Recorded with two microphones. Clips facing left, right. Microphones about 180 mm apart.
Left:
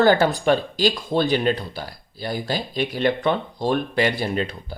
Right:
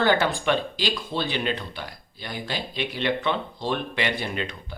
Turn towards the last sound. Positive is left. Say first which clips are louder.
# left 6 dB
turn(degrees=35)  # may be behind; listen again after turning